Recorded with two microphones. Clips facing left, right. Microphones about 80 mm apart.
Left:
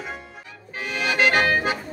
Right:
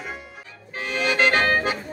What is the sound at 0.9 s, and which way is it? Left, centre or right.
Music, right.